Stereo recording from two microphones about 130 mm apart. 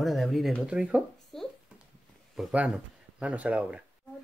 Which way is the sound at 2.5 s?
10° right (ahead or behind).